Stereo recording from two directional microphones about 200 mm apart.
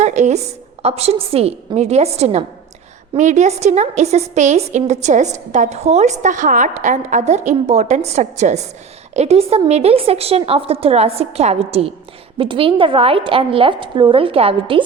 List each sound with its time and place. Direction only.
0.0 s a woman's voice: 35° right (ahead or behind)